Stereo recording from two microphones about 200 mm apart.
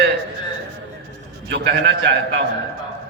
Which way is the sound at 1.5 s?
60° right (ahead or behind).